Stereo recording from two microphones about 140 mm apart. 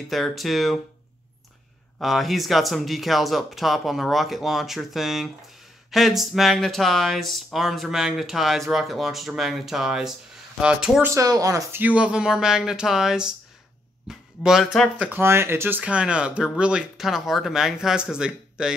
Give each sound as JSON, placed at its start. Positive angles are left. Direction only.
{"t": 0.1, "sound": "speech", "side_deg": 0}
{"t": 2.0, "sound": "speech", "side_deg": 0}
{"t": 11.1, "sound": "speech", "side_deg": -25}
{"t": 11.8, "sound": "speech", "side_deg": -10}
{"t": 15.0, "sound": "speech", "side_deg": -15}